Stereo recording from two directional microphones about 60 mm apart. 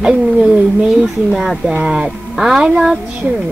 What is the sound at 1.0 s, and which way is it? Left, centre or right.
Speech, centre.